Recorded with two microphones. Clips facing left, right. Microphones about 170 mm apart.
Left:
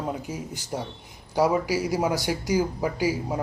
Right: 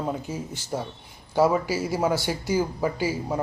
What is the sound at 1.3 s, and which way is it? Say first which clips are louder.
A man's voice: right 1 dB; 10° left (ahead or behind).